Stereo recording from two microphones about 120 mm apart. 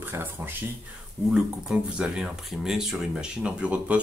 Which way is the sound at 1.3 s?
5° right (ahead or behind).